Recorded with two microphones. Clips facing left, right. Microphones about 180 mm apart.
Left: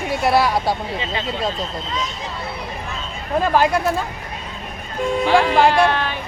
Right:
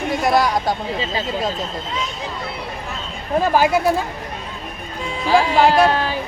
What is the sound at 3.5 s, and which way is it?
Speech, 5° right (ahead or behind).